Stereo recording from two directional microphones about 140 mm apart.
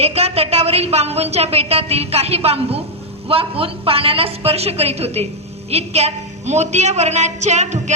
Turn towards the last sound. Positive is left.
turn(degrees=-55)  # may be behind; listen again after turning